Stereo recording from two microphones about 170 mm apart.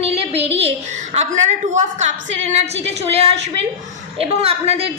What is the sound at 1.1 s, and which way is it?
A woman's voice, 40° right (ahead or behind).